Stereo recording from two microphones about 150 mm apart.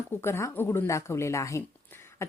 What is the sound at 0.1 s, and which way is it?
Speech, 15° left (ahead or behind).